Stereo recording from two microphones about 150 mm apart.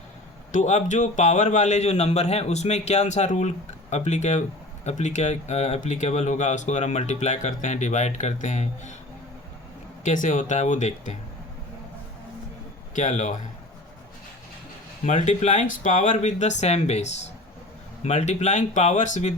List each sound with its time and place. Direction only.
0.5 s speech: 55° left (ahead or behind)
10.0 s speech: 55° left (ahead or behind)
12.9 s speech: 55° left (ahead or behind)
15.0 s speech: 55° left (ahead or behind)